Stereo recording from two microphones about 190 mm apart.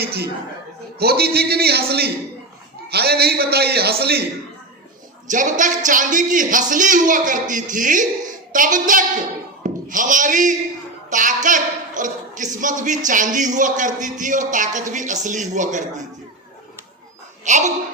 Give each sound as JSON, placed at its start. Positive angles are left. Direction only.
{"t": 0.0, "sound": "a man's voice", "side_deg": -55}
{"t": 5.3, "sound": "speech", "side_deg": -40}
{"t": 17.4, "sound": "a woman's voice", "side_deg": -40}